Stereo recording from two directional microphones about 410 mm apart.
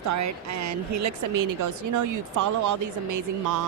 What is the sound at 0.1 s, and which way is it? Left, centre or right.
Speech, right.